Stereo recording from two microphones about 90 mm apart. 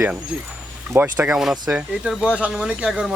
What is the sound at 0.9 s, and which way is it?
Speech, 15° right (ahead or behind).